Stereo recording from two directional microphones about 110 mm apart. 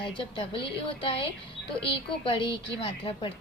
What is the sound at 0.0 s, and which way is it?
A woman's voice, 50° left (ahead or behind).